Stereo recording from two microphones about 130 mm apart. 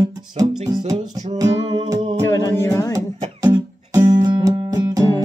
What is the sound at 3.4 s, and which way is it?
Music, 25° right (ahead or behind).